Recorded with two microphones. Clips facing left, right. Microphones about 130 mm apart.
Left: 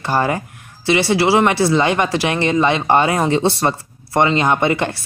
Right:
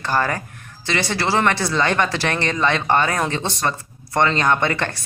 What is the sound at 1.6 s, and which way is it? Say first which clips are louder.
Speech: left 5 dB; 20° left (ahead or behind).